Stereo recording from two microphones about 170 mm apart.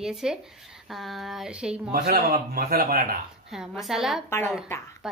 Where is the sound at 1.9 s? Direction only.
65° right (ahead or behind).